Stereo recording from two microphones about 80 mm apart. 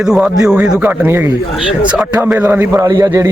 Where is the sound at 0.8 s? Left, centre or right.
Right.